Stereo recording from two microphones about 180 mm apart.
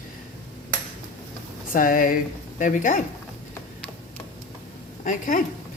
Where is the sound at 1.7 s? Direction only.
50° left (ahead or behind).